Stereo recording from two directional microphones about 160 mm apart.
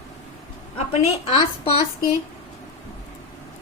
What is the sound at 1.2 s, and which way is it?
Speech, 40° left (ahead or behind).